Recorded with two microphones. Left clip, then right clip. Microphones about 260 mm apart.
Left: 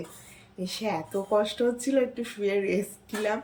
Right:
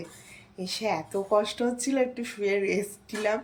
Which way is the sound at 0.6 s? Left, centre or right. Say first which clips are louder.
Right 2 dB; centre.